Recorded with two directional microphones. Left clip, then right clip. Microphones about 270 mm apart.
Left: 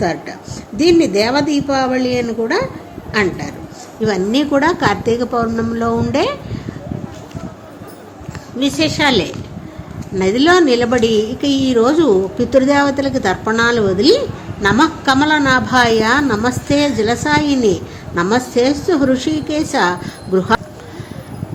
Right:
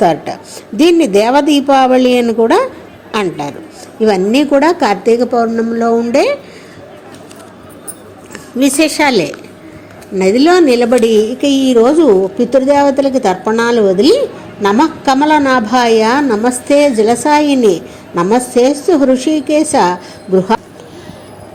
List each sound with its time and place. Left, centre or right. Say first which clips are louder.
0.0 s a woman's voice: right 8 dB; right
8.5 s a woman's voice: right 5 dB; right